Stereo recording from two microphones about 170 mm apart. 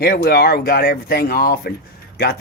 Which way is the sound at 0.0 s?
65° left (ahead or behind).